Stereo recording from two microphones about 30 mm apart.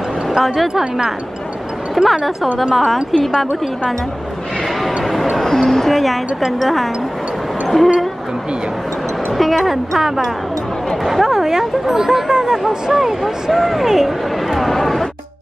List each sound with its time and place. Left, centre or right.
0.7 s speech: centre
2.0 s speech: centre
5.7 s speech: centre
9.4 s speech: centre
9.9 s speech: centre